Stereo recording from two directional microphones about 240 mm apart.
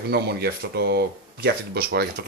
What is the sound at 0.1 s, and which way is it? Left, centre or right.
Speech, right.